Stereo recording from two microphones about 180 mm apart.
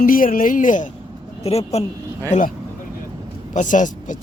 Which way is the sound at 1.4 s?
35° left (ahead or behind).